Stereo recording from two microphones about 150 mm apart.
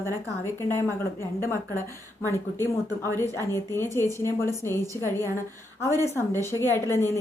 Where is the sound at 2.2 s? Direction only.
15° left (ahead or behind).